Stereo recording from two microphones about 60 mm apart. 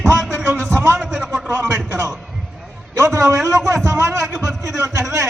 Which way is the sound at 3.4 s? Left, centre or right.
Centre.